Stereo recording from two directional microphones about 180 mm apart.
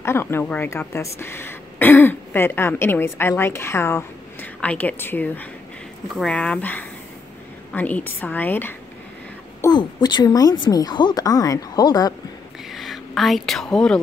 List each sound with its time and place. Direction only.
0.0 s speech: 15° left (ahead or behind)
9.6 s a woman's voice: 25° left (ahead or behind)
12.7 s a sound: centre (ahead or behind)